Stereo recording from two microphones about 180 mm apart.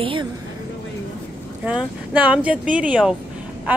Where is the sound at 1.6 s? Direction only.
5° right (ahead or behind).